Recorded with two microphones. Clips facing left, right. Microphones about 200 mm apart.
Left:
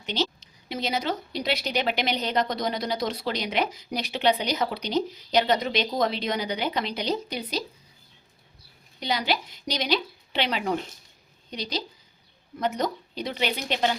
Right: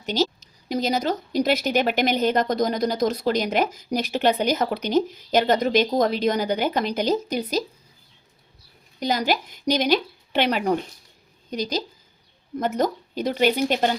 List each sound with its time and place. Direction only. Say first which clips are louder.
0.0 s a woman's voice: right 5 dB; 40° right (ahead or behind)
9.0 s a woman's voice: right 4 dB; 45° right (ahead or behind)